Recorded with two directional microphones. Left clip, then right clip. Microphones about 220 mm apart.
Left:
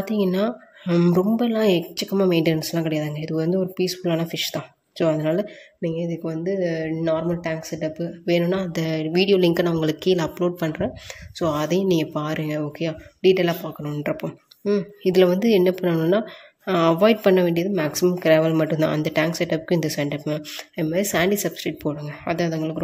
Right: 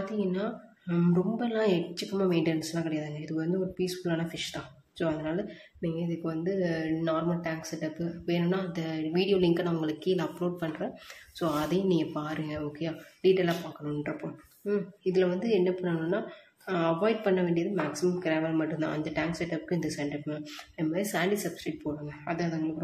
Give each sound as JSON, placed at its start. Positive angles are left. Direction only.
{"t": 0.0, "sound": "a woman's voice", "side_deg": 45}